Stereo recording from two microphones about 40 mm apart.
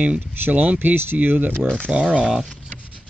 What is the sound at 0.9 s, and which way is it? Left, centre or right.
Speech, right.